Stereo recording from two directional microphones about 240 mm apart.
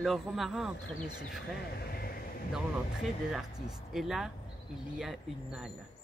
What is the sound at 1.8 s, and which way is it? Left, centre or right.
Vehicle, left.